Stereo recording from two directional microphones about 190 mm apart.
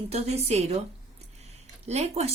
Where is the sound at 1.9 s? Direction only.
35° right (ahead or behind).